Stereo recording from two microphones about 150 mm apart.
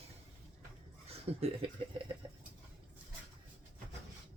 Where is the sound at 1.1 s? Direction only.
40° right (ahead or behind).